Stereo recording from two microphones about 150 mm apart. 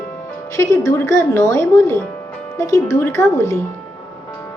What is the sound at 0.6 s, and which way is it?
A woman's voice, 20° left (ahead or behind).